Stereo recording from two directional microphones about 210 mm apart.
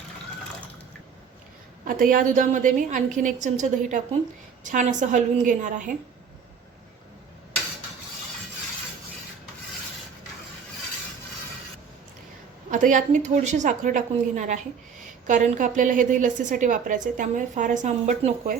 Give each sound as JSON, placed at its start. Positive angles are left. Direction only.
{"t": 1.8, "sound": "a woman's voice", "side_deg": -40}
{"t": 12.7, "sound": "a woman's voice", "side_deg": -40}